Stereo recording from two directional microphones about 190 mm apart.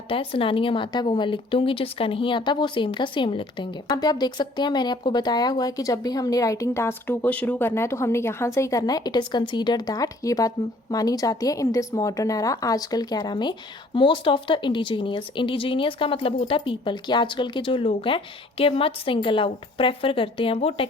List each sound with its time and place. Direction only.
0.1 s speech: 30° left (ahead or behind)